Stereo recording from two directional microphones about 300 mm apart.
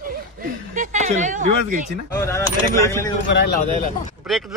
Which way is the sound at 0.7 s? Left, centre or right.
Right.